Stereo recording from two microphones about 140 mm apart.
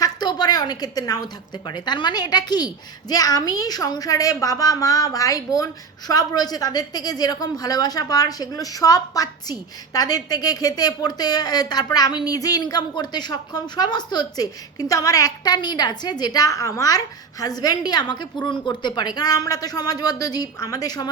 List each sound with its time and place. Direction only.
0.0 s a woman's voice: 30° left (ahead or behind)